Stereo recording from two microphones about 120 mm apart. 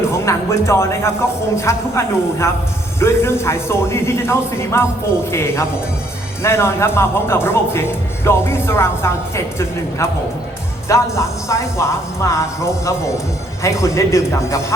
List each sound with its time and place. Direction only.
0.1 s speech: 25° left (ahead or behind)